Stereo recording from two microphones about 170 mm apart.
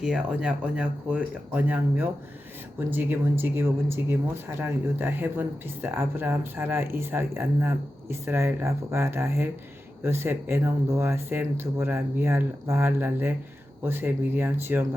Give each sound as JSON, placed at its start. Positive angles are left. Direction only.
{"t": 0.0, "sound": "speech", "side_deg": -5}